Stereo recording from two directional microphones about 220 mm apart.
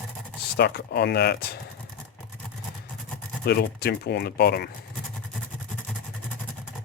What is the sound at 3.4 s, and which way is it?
Speech, 45° left (ahead or behind).